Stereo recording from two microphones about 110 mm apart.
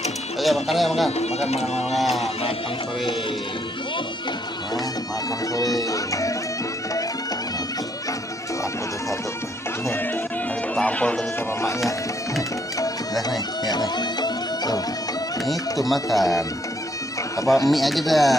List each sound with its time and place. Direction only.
0.4 s speech: centre (ahead or behind)
1.1 s speech: 75° left (ahead or behind)
1.9 s speech: centre (ahead or behind)
5.8 s music: 30° left (ahead or behind)
10.8 s speech: 10° left (ahead or behind)
13.7 s music: 40° left (ahead or behind)
15.8 s speech: centre (ahead or behind)
17.4 s music: 30° left (ahead or behind)
17.6 s speech: centre (ahead or behind)